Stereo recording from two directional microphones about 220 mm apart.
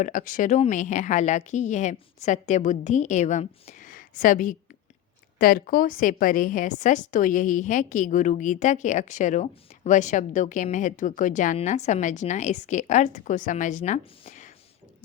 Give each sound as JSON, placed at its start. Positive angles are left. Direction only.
{"t": 0.0, "sound": "a woman's voice", "side_deg": 35}